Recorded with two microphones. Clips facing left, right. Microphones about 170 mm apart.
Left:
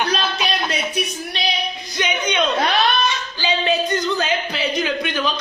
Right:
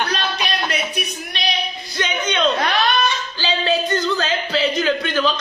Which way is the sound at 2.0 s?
15° left (ahead or behind).